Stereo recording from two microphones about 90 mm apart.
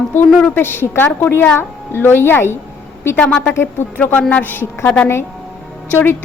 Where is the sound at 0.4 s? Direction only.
25° left (ahead or behind).